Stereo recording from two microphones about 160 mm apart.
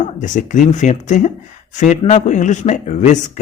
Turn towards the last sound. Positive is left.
turn(degrees=45)  # may be behind; listen again after turning